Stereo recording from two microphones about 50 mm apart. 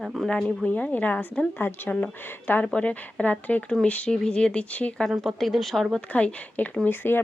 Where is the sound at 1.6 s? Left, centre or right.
Left.